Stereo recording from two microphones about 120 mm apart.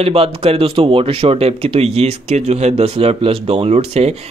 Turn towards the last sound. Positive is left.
turn(degrees=-60)  # may be behind; listen again after turning